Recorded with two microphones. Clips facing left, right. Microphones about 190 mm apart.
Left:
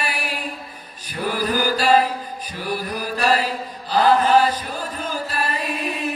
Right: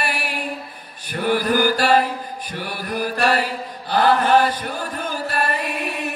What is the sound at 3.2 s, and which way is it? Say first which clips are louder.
Mantra: left 2 dB; 60° right (ahead or behind).